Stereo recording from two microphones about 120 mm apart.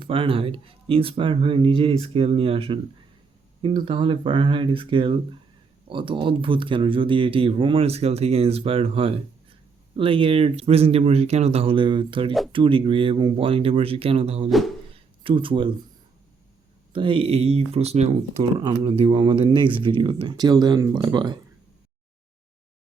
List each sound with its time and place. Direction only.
0.0 s speech: 50° right (ahead or behind)
14.9 s a sound: 50° right (ahead or behind)
16.9 s speech: 45° right (ahead or behind); by 18.4 s 65° right (ahead or behind)
18.6 s speech: 35° right (ahead or behind)
18.9 s speech: 45° right (ahead or behind)